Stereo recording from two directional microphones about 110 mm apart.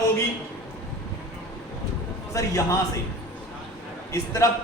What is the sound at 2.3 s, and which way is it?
Speech, 30° left (ahead or behind).